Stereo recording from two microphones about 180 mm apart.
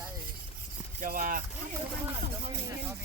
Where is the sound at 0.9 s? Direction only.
50° right (ahead or behind).